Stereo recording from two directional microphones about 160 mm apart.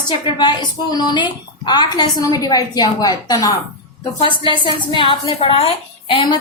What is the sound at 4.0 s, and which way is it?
A woman's voice, 30° left (ahead or behind).